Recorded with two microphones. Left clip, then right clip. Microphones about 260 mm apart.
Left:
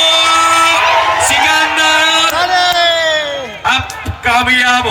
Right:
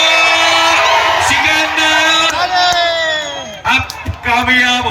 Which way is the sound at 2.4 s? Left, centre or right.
Left.